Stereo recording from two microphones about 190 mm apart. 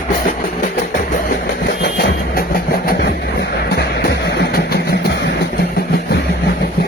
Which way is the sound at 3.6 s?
60° left (ahead or behind).